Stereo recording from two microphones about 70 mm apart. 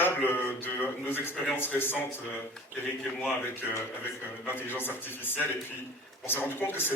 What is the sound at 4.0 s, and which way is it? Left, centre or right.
A man's voice, left.